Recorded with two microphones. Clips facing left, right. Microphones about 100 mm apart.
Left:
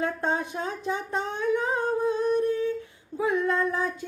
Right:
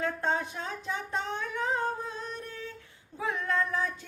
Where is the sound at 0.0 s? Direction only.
15° left (ahead or behind).